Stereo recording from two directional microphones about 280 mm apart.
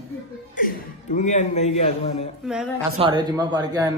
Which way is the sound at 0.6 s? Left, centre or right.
Left.